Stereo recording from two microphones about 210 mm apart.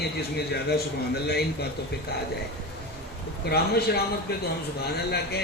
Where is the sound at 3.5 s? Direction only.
50° left (ahead or behind).